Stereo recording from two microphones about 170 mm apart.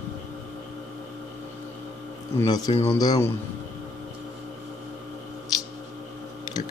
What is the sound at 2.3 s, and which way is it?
Speech, 25° left (ahead or behind).